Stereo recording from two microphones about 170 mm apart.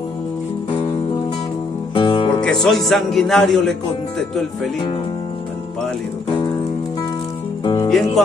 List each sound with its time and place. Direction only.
2.0 s music: 30° left (ahead or behind)
2.4 s speech: 5° left (ahead or behind)
7.6 s music: 25° left (ahead or behind)